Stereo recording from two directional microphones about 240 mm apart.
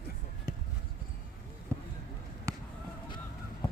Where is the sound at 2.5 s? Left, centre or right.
Centre.